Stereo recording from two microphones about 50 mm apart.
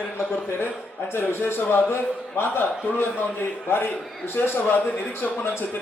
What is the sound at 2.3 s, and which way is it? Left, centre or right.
Speech, left.